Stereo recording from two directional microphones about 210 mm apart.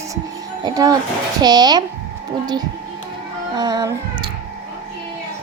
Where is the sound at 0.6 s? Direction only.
20° right (ahead or behind).